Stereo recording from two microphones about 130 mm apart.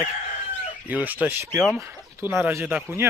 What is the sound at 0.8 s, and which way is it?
Speech, 10° right (ahead or behind).